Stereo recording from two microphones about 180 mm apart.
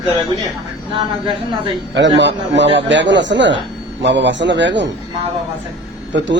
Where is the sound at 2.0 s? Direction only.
80° right.